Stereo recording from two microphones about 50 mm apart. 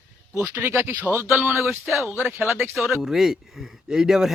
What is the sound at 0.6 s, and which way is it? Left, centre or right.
Speech, right.